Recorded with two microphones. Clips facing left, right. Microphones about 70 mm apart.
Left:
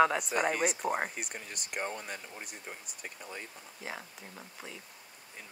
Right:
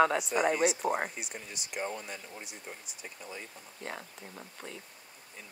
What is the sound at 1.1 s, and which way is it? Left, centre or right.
Speech, left.